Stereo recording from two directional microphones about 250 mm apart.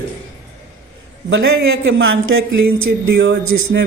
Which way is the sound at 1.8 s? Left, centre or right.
Right.